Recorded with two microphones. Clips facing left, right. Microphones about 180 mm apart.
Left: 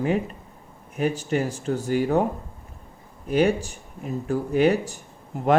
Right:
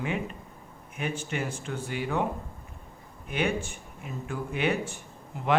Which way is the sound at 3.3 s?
35° left (ahead or behind).